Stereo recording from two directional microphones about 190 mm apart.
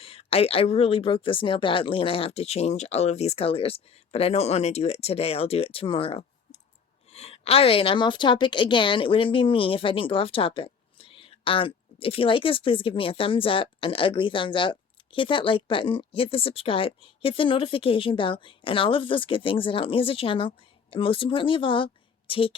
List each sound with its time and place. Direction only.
0.0 s a woman's voice: 30° left (ahead or behind)